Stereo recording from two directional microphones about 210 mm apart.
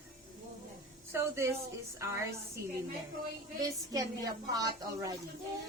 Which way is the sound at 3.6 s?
15° right (ahead or behind).